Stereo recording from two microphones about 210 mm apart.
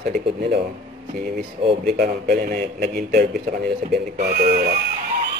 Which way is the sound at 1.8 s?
45° right (ahead or behind).